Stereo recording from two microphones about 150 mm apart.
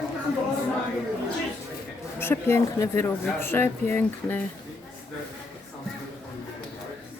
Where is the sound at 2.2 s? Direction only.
15° left (ahead or behind).